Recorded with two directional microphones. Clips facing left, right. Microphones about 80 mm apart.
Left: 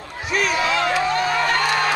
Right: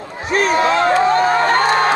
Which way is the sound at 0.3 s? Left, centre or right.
Right.